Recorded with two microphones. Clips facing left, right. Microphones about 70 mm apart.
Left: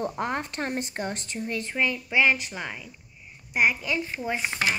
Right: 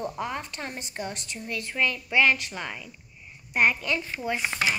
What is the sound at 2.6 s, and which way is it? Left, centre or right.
A woman's voice, centre.